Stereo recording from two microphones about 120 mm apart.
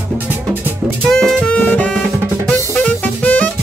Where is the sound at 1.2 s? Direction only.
10° left (ahead or behind).